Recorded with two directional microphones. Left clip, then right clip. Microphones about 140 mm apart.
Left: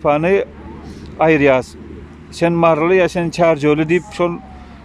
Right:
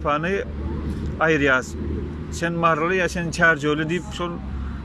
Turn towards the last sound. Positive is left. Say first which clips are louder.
# left 10 dB
turn(degrees=35)  # may be behind; listen again after turning